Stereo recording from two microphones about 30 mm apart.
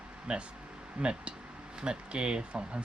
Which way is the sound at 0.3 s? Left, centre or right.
Right.